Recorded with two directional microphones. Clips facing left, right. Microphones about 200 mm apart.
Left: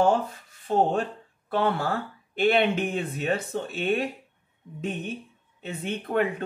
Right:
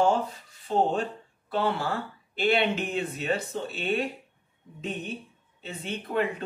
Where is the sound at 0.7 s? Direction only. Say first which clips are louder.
Left 2 dB; 50° left (ahead or behind).